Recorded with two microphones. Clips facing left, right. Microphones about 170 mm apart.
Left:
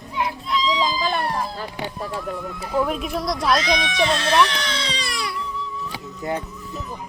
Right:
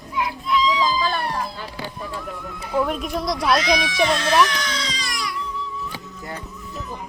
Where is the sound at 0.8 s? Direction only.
20° left (ahead or behind).